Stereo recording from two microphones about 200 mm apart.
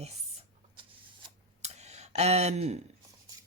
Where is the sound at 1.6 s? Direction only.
35° right (ahead or behind).